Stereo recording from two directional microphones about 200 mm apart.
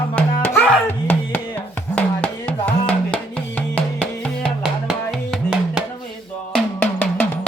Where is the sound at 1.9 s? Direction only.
5° left (ahead or behind).